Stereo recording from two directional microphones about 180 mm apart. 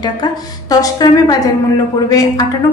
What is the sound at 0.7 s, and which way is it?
A woman's voice, 20° left (ahead or behind).